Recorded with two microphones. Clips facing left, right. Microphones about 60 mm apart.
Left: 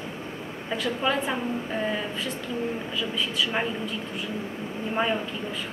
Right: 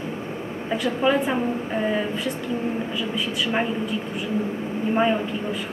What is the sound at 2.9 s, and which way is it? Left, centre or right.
Speech, centre.